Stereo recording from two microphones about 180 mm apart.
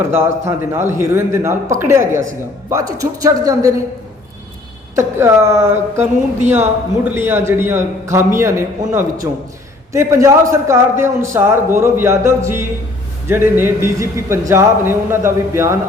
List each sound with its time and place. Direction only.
0.0 s a man's voice: 15° right (ahead or behind)
4.9 s a man's voice: 15° right (ahead or behind)